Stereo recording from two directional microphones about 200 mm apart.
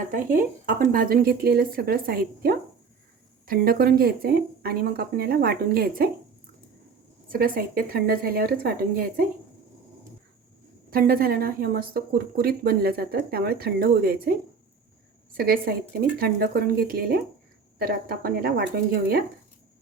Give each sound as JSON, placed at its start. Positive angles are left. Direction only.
{"t": 0.1, "sound": "speech", "side_deg": -45}
{"t": 7.3, "sound": "speech", "side_deg": -45}
{"t": 10.9, "sound": "speech", "side_deg": -50}
{"t": 15.4, "sound": "speech", "side_deg": -50}